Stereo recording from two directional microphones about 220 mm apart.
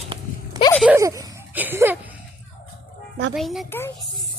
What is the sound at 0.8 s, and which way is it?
Speech, 10° right (ahead or behind).